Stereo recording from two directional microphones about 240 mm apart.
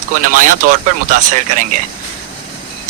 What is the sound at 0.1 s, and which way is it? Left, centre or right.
Speech, right.